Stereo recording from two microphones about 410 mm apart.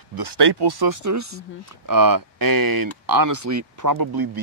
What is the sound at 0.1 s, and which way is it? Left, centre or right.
Speech, right.